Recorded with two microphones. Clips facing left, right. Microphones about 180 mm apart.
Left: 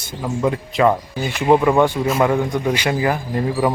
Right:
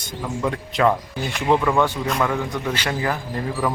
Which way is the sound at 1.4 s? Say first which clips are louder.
Left 5 dB; 15° left (ahead or behind).